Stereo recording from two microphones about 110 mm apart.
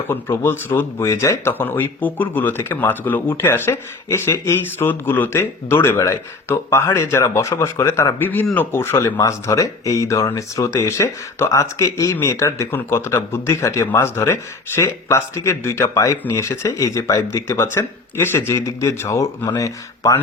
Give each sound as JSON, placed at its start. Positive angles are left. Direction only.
{"t": 0.1, "sound": "a man's voice", "side_deg": 20}